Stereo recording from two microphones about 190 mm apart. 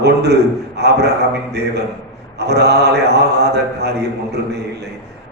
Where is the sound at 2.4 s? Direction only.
60° right (ahead or behind).